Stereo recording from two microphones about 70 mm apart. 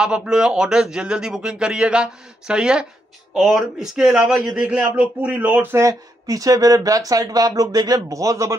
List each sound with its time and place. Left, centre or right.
0.0 s a man's voice: centre; by 5.8 s right
5.8 s speech: right
8.1 s a man's voice: right